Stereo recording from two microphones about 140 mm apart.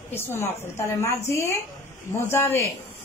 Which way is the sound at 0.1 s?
15° left (ahead or behind).